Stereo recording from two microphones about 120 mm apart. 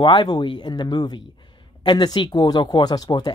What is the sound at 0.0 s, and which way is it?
Speech, 40° left (ahead or behind).